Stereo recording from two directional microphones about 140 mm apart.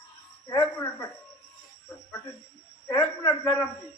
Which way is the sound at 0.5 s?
20° left (ahead or behind).